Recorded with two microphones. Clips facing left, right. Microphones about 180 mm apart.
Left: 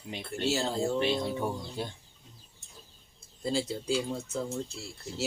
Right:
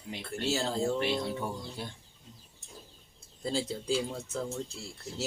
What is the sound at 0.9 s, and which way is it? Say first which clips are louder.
Speech: left 2 dB; 20° left (ahead or behind).